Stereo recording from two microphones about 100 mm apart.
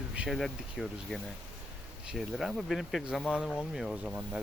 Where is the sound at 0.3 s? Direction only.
Centre (ahead or behind).